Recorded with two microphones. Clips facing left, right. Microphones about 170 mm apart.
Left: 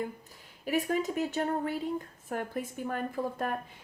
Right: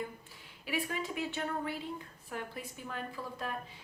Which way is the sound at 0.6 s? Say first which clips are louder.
Left 7 dB; 45° left (ahead or behind).